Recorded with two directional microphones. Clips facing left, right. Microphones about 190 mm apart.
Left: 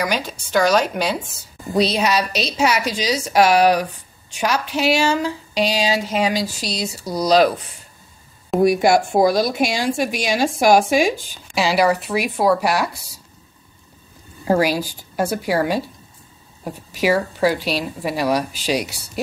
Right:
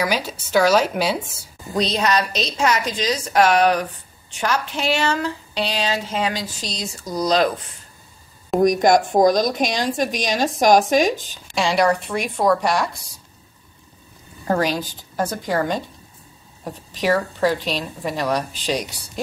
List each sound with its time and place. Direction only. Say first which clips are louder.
0.0 s speech: even; 5° right (ahead or behind)
1.7 s speech: left 2 dB; 10° left (ahead or behind)
14.5 s speech: left 3 dB; 10° left (ahead or behind)